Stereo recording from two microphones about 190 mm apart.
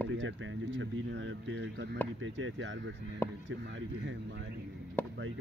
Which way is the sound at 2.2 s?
85° right.